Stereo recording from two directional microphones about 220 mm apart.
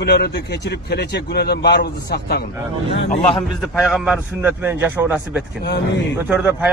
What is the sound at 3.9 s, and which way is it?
A man's voice, 5° right (ahead or behind).